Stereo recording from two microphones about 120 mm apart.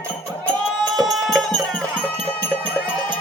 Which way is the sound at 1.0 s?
Centre (ahead or behind).